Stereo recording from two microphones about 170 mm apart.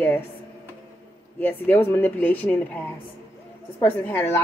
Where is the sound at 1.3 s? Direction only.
10° left (ahead or behind).